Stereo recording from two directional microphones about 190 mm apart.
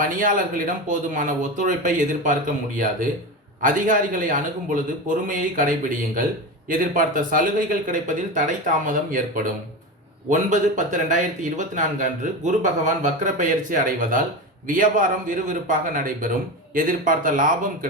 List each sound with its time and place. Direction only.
0.0 s speech: 45° right (ahead or behind)
3.6 s speech: 45° right (ahead or behind)